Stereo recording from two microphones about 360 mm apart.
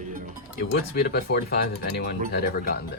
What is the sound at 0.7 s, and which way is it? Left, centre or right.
Speech, left.